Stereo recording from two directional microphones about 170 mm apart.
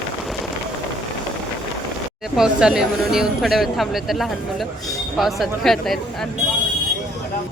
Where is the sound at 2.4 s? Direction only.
5° right (ahead or behind).